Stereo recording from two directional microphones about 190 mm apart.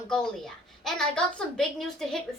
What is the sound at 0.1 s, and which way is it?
A woman's voice, 5° left (ahead or behind).